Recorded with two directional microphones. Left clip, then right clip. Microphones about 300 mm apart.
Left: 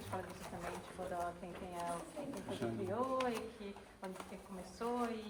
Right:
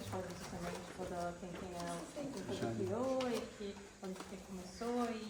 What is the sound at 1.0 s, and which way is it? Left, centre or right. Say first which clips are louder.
Speech: left 2 dB; left.